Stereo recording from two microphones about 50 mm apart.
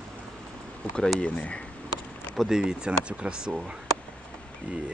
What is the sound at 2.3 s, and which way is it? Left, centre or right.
Speech, centre.